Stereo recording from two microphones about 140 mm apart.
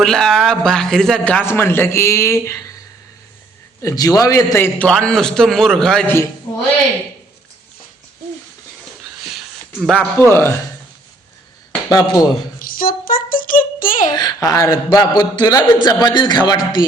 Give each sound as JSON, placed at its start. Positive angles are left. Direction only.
{"t": 0.0, "sound": "a man's voice", "side_deg": 5}
{"t": 3.8, "sound": "speech", "side_deg": 25}
{"t": 4.9, "sound": "a man's voice", "side_deg": 5}
{"t": 9.8, "sound": "a man's voice", "side_deg": 5}
{"t": 11.9, "sound": "speech", "side_deg": 25}
{"t": 12.5, "sound": "a sound", "side_deg": 90}
{"t": 14.1, "sound": "a child's voice", "side_deg": 30}